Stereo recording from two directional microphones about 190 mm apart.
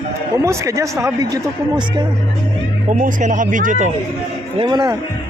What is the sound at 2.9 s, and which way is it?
Speech, 45° right (ahead or behind).